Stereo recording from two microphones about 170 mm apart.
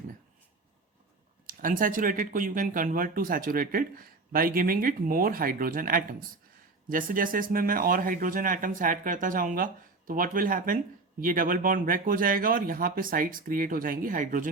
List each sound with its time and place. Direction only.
1.5 s speech: 55° right (ahead or behind)